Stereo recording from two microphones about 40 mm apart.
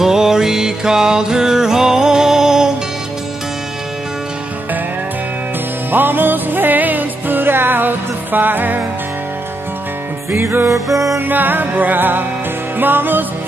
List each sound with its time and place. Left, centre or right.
0.0 s music: centre
5.9 s music: right
10.3 s music: right
11.1 s music: right